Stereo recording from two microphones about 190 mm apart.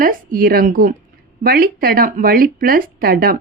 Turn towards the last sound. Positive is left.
turn(degrees=-50)  # may be behind; listen again after turning